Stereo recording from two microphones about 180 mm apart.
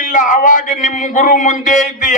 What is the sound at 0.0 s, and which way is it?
Speech, 45° left (ahead or behind).